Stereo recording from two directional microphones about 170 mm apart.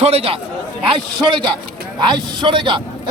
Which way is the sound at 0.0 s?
35° right (ahead or behind).